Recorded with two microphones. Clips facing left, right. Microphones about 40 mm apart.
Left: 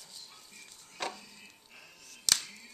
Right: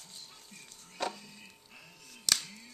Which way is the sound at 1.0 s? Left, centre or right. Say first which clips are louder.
Right 2 dB; centre.